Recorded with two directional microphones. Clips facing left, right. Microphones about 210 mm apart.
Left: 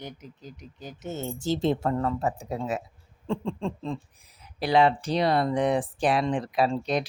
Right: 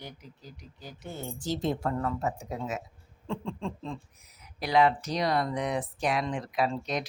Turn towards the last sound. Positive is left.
turn(degrees=30)  # may be behind; listen again after turning